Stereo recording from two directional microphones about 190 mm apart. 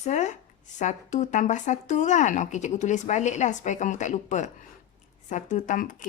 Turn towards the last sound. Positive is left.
turn(degrees=40)  # may be behind; listen again after turning